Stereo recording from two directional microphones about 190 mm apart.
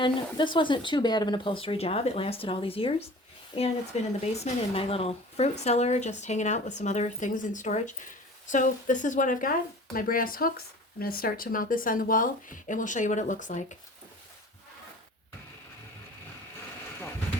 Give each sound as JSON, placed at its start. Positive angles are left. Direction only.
{"t": 0.0, "sound": "speech", "side_deg": 25}